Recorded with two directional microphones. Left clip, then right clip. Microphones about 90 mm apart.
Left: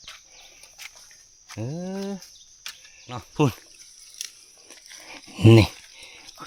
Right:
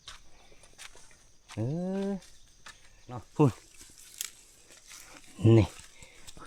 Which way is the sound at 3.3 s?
40° left (ahead or behind).